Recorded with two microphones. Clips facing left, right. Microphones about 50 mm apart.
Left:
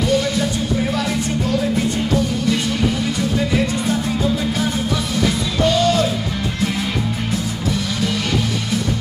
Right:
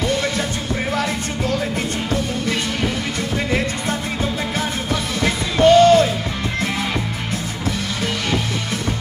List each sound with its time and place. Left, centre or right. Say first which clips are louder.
5.2 s music: right 4 dB; right